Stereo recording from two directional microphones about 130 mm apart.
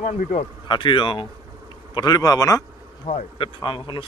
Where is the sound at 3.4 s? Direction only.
40° left (ahead or behind).